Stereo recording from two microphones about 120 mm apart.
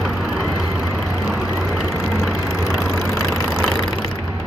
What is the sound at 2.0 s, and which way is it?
Vehicle, 5° right (ahead or behind).